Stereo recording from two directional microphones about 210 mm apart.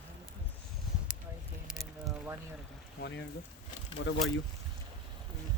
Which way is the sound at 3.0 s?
55° left (ahead or behind).